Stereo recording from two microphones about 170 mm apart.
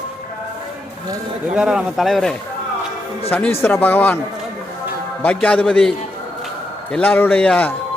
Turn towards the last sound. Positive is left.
turn(degrees=10)  # may be behind; listen again after turning